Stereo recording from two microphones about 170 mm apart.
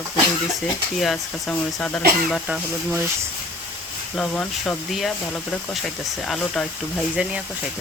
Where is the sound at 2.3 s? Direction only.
5° right (ahead or behind).